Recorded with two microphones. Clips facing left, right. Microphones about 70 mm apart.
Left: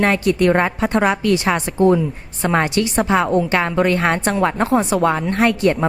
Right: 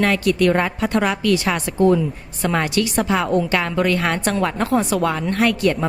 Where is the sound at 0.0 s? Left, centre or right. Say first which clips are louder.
Left 1 dB; left.